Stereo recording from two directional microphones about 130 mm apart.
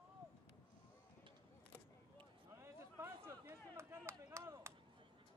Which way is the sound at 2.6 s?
20° right (ahead or behind).